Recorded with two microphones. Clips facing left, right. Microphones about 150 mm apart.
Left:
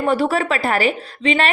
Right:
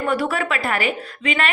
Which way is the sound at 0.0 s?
30° left (ahead or behind).